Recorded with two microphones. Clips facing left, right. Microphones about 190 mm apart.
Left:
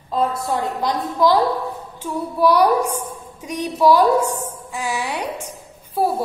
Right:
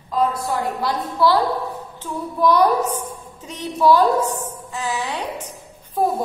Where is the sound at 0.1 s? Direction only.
25° left (ahead or behind).